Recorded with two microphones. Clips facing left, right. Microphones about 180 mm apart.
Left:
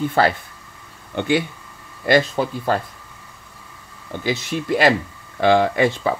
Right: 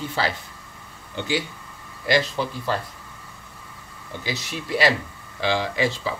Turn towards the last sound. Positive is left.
turn(degrees=55)  # may be behind; listen again after turning